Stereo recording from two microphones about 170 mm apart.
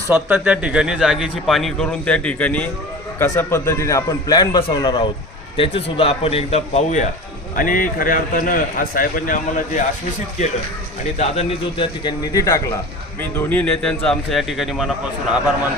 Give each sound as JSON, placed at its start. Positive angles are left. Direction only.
{"t": 0.1, "sound": "a man's voice", "side_deg": -10}
{"t": 7.5, "sound": "a man's voice", "side_deg": 55}
{"t": 11.0, "sound": "speech", "side_deg": 40}
{"t": 12.3, "sound": "a man's voice", "side_deg": 20}
{"t": 13.5, "sound": "a man's voice", "side_deg": 10}